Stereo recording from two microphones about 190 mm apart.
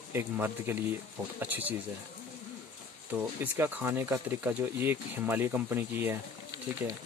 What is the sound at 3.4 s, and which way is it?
Speech, 10° right (ahead or behind).